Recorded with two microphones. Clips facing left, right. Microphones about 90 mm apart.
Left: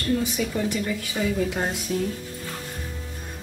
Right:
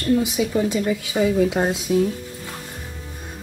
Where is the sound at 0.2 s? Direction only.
15° right (ahead or behind).